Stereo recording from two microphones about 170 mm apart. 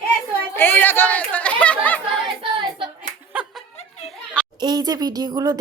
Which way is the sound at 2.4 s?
30° right (ahead or behind).